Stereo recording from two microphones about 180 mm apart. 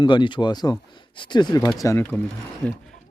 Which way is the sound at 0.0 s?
25° left (ahead or behind).